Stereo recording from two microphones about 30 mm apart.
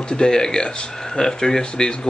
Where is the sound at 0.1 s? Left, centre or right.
Left.